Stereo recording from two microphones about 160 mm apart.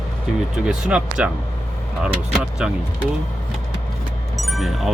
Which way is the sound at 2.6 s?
5° right (ahead or behind).